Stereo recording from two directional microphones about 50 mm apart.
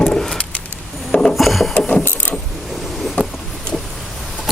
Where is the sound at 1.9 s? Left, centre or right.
Left.